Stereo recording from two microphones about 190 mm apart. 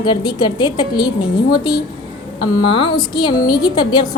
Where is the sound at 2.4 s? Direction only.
25° left (ahead or behind).